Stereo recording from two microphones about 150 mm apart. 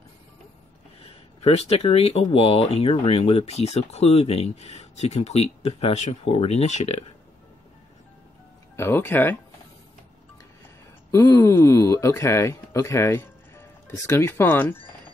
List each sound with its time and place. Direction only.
1.0 s speech: 40° left (ahead or behind)
8.7 s speech: 15° left (ahead or behind)
11.1 s speech: 15° left (ahead or behind)